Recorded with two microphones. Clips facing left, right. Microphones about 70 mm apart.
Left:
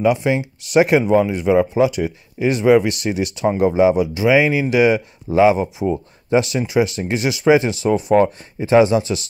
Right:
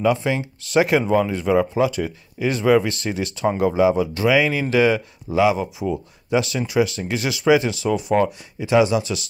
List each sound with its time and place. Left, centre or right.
0.0 s speech: left
5.3 s speech: left